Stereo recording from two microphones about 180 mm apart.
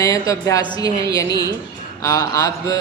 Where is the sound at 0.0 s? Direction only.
15° left (ahead or behind).